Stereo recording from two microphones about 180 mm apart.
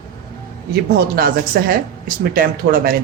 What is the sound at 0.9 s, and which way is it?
Speech, 60° right (ahead or behind).